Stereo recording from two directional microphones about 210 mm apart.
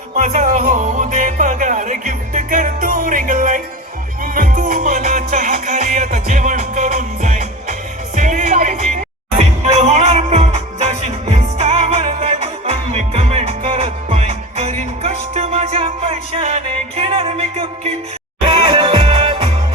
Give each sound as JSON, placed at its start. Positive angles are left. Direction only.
{"t": 0.2, "sound": "music", "side_deg": -40}